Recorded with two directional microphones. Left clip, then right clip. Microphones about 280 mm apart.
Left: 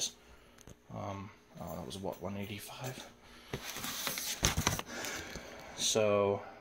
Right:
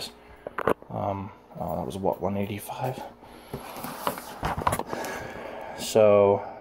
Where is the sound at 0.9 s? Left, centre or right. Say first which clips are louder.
Right 13 dB; centre.